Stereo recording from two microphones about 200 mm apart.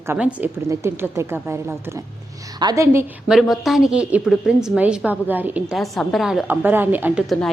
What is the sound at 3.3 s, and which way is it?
A woman's voice, centre (ahead or behind).